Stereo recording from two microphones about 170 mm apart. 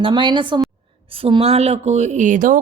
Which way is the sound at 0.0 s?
30° right (ahead or behind).